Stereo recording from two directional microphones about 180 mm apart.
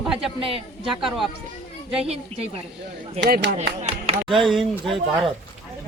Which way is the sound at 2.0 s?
35° right (ahead or behind).